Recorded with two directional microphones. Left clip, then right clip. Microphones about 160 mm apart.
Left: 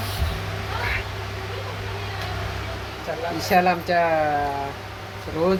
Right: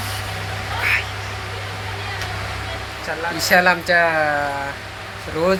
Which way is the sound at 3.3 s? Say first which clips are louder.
Right 4 dB; 15° left (ahead or behind).